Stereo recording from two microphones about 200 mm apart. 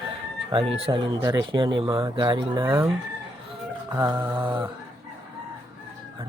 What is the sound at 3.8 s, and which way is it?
Speech, 15° right (ahead or behind).